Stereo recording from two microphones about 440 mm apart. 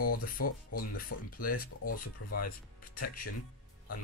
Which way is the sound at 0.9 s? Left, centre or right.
Centre.